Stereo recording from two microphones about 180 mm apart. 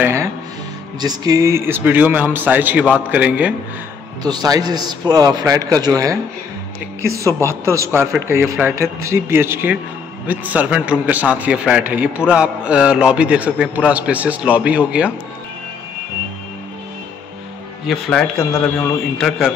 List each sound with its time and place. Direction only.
0.0 s music: 15° right (ahead or behind)
1.0 s a man's voice: 20° right (ahead or behind)
4.2 s a man's voice: 20° right (ahead or behind); by 15.1 s 5° right (ahead or behind)
17.8 s a man's voice: centre (ahead or behind)